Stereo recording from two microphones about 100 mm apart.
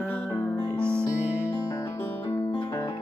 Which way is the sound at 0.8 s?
25° right (ahead or behind).